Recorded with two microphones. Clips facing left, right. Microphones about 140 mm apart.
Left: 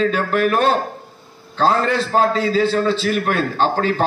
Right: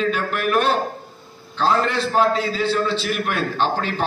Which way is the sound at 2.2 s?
40° left (ahead or behind).